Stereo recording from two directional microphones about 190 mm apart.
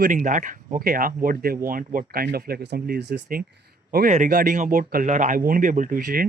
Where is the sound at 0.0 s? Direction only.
45° right (ahead or behind).